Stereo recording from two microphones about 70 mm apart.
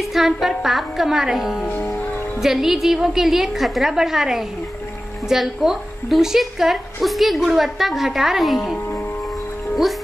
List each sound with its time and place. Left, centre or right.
0.1 s speech: centre
1.7 s music: left
2.4 s speech: centre